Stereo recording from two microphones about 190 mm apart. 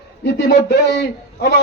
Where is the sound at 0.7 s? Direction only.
60° left (ahead or behind).